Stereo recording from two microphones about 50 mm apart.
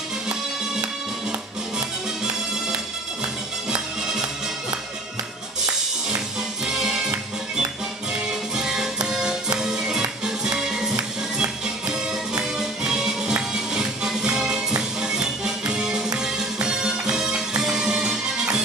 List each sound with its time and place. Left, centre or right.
1.8 s music: centre
5.7 s music: centre
8.1 s music: centre